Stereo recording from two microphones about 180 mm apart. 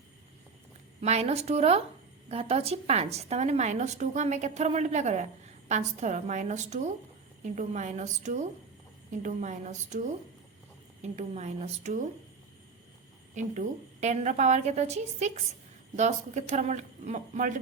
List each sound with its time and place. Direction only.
1.0 s a woman's voice: 35° right (ahead or behind)
13.3 s a woman's voice: 45° right (ahead or behind)